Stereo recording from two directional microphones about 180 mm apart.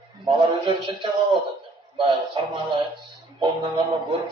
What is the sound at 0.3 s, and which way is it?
Music, 25° right (ahead or behind).